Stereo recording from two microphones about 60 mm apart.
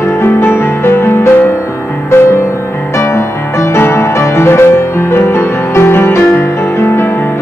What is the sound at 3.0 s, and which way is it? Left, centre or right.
Music, left.